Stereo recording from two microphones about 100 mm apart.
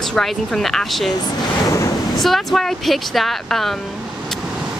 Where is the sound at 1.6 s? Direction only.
35° left (ahead or behind).